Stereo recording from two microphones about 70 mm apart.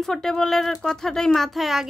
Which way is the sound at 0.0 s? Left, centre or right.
Centre.